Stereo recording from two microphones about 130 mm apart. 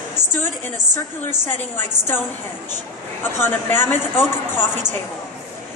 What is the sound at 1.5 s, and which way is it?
Speech, 15° left (ahead or behind).